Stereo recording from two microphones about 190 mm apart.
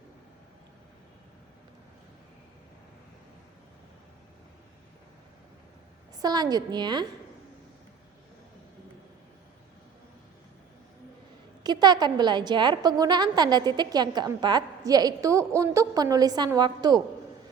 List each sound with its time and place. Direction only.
6.1 s a woman's voice: 20° right (ahead or behind)
11.6 s a woman's voice: 20° right (ahead or behind)